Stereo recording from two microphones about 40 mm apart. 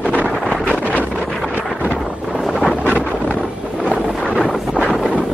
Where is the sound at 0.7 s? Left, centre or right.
Left.